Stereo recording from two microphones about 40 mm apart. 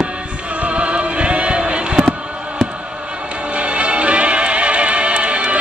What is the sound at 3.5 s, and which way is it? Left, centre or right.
Music, right.